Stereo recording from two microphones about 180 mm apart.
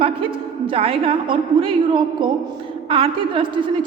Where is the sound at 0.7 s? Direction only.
30° right (ahead or behind).